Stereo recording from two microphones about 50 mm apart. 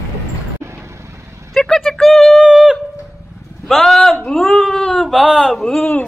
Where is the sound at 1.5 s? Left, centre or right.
Centre.